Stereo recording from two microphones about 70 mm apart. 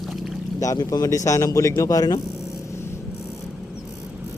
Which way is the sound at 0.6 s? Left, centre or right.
Left.